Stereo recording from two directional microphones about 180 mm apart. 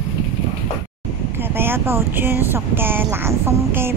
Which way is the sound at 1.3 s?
10° right (ahead or behind).